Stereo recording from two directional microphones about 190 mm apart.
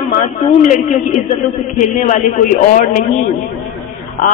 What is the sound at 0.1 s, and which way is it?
Speech, 40° left (ahead or behind).